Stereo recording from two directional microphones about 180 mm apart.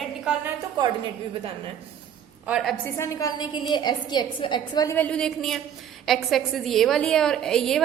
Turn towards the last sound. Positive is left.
turn(degrees=0)  # may be behind; listen again after turning